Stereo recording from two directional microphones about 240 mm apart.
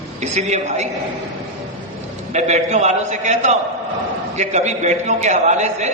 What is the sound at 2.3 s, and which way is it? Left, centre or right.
A man's voice, right.